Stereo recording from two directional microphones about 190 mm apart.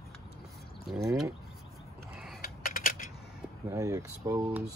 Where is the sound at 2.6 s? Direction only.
45° left (ahead or behind).